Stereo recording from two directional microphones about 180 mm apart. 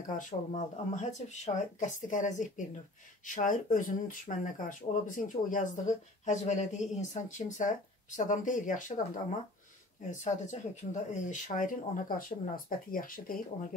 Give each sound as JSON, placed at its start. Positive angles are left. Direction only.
{"t": 0.0, "sound": "speech", "side_deg": 45}
{"t": 10.2, "sound": "speech", "side_deg": 40}